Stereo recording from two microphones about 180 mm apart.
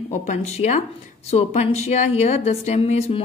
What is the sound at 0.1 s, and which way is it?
A woman's voice, 40° left (ahead or behind).